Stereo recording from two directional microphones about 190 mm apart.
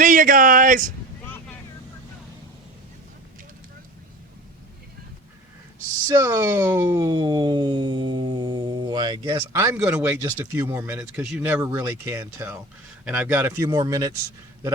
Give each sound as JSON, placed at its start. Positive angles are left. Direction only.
{"t": 0.0, "sound": "speech", "side_deg": -45}
{"t": 6.1, "sound": "speech", "side_deg": -15}